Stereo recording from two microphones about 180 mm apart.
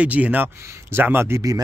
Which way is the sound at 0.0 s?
10° right (ahead or behind).